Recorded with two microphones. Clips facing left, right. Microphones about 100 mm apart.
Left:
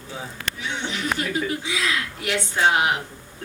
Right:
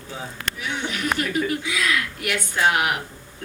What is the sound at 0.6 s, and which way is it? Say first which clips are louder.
Speech: right 1 dB; 30° left (ahead or behind).